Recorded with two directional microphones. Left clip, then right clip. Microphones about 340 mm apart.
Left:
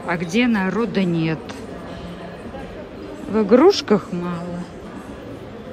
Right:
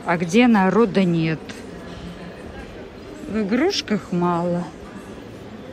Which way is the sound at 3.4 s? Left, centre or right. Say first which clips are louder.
Left 8 dB; centre.